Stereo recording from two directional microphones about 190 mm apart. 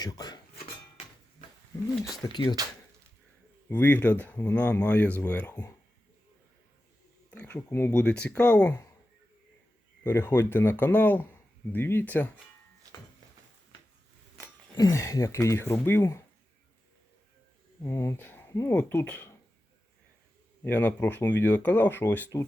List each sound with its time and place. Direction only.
0.0 s speech: 20° left (ahead or behind)
0.6 s dishes: 30° left (ahead or behind)
2.2 s speech: 20° left (ahead or behind)
3.7 s speech: 10° left (ahead or behind)
7.3 s speech: 10° left (ahead or behind)
10.0 s speech: 10° left (ahead or behind)
14.8 s speech: 15° left (ahead or behind)
17.8 s speech: 15° left (ahead or behind)
20.7 s speech: 10° left (ahead or behind)